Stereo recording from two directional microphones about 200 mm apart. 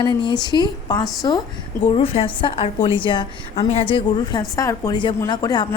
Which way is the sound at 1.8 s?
25° left (ahead or behind).